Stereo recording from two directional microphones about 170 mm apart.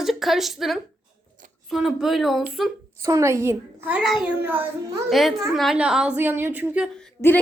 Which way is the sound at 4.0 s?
Centre (ahead or behind).